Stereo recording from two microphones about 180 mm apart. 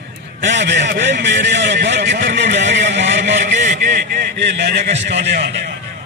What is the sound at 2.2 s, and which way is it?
Speech, 45° right (ahead or behind).